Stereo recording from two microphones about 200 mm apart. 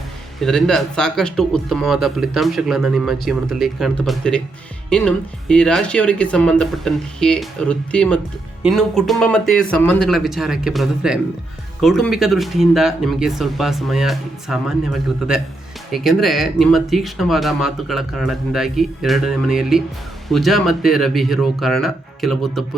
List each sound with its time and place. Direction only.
0.3 s a man's voice: centre (ahead or behind)